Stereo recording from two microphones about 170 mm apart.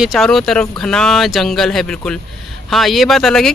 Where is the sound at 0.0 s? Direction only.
Centre (ahead or behind).